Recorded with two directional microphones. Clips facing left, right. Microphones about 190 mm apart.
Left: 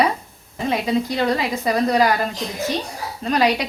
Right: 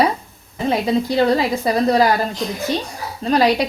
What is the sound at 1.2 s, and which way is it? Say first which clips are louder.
Speech: right 5 dB; 35° right (ahead or behind).